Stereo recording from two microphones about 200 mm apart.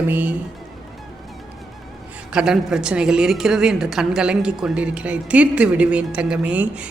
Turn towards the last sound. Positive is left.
turn(degrees=-5)  # may be behind; listen again after turning